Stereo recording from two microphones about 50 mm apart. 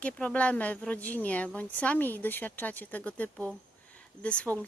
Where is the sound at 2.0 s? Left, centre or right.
Left.